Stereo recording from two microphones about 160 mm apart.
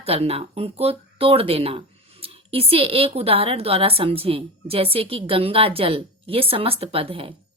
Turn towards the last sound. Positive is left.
turn(degrees=-35)  # may be behind; listen again after turning